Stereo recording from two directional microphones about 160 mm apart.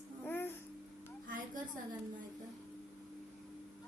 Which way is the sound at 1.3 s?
55° right (ahead or behind).